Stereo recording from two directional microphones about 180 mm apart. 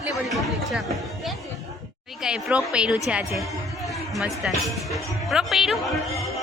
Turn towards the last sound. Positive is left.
turn(degrees=0)  # may be behind; listen again after turning